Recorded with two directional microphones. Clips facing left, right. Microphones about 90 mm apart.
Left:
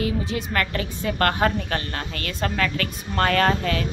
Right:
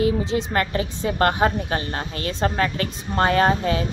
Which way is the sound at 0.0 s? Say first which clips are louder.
Right 5 dB; 30° right (ahead or behind).